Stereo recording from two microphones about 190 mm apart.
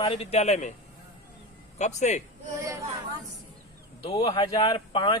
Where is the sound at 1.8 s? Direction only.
35° left (ahead or behind).